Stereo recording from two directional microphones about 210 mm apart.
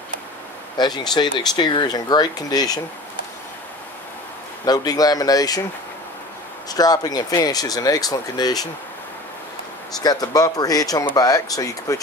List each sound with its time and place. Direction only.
0.7 s speech: 20° left (ahead or behind)
4.6 s speech: 20° left (ahead or behind)
6.7 s speech: 20° left (ahead or behind)
10.0 s speech: 20° left (ahead or behind)